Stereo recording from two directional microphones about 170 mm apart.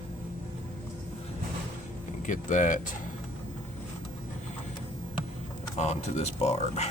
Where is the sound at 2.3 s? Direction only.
50° left (ahead or behind).